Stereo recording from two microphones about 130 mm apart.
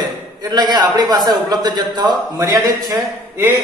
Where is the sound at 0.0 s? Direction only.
30° right (ahead or behind).